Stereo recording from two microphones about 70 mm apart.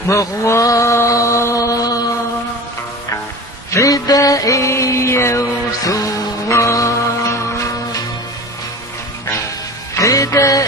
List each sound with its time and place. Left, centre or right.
0.2 s mantra: left
3.7 s music: left
5.4 s music: left
9.9 s music: left